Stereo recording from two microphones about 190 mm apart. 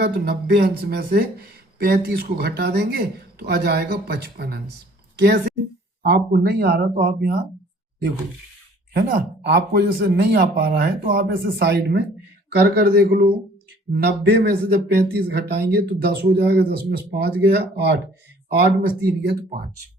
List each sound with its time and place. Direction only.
0.0 s a woman's voice: 55° right (ahead or behind)
8.9 s speech: 50° right (ahead or behind)